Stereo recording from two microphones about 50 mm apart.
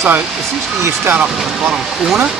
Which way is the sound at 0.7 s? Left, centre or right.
Right.